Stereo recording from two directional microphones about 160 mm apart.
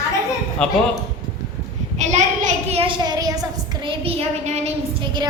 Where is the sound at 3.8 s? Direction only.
40° right (ahead or behind).